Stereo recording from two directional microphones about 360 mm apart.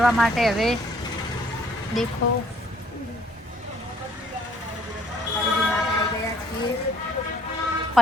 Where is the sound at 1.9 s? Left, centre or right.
Centre.